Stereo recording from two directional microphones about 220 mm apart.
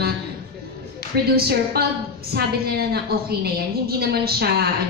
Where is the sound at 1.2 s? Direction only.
45° right (ahead or behind).